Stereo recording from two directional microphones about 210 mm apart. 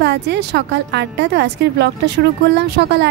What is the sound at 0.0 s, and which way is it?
A woman's voice, 55° right (ahead or behind).